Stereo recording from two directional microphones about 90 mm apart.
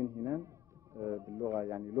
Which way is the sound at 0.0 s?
35° right (ahead or behind).